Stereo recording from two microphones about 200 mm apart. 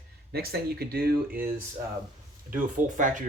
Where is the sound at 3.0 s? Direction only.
40° right (ahead or behind).